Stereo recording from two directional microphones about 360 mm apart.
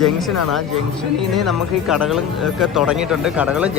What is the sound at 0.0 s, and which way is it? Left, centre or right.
Speech, centre.